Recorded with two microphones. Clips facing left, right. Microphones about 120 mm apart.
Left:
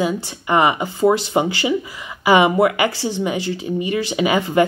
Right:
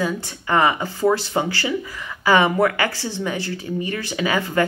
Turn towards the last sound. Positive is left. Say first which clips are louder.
# left 4 dB
turn(degrees=20)  # may be behind; listen again after turning